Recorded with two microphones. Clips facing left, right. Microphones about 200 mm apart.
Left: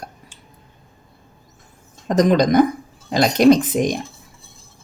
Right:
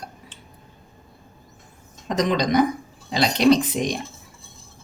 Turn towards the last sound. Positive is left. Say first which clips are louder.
# left 4 dB
turn(degrees=50)  # may be behind; listen again after turning